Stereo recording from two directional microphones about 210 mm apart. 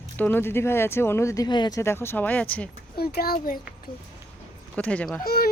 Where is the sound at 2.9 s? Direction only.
45° left (ahead or behind).